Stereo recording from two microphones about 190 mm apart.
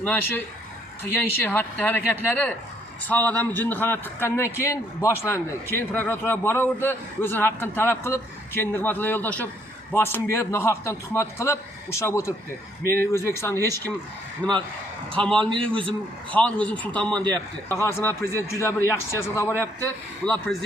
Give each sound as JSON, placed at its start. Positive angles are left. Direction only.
{"t": 0.0, "sound": "a man's voice", "side_deg": 10}
{"t": 18.3, "sound": "a man's voice", "side_deg": -15}
{"t": 18.6, "sound": "a man's voice", "side_deg": 15}